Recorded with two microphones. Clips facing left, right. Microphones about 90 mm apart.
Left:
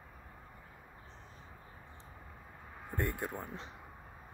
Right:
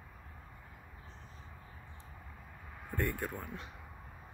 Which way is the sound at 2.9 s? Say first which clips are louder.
Even; 25° left (ahead or behind).